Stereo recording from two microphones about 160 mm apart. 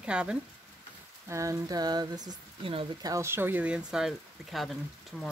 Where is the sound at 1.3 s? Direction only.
20° right (ahead or behind).